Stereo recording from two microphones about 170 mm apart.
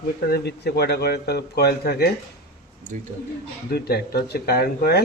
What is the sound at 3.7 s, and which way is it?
A man's voice, 70° left (ahead or behind).